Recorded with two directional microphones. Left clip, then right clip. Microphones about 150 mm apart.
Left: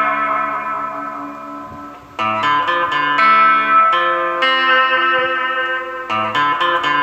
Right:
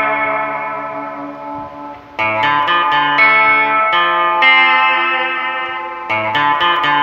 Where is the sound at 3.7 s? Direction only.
30° right (ahead or behind).